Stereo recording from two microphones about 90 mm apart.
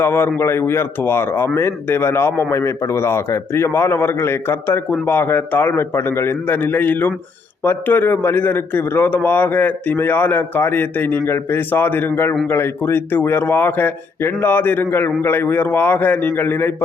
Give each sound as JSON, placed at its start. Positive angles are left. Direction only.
{"t": 0.0, "sound": "a man's voice", "side_deg": 25}